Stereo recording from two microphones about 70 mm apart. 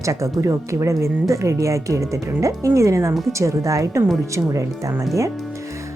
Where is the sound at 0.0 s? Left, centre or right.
Right.